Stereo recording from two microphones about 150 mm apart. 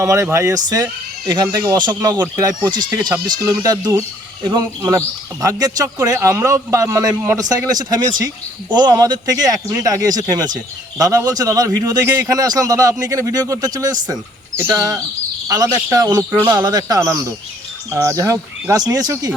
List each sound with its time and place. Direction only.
0.0 s speech: 20° right (ahead or behind)
15.4 s speech: 25° right (ahead or behind)